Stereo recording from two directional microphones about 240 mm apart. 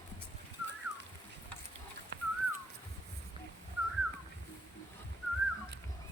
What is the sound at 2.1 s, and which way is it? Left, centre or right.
Whistling, right.